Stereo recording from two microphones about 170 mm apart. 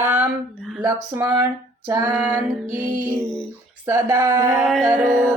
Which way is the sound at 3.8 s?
15° right (ahead or behind).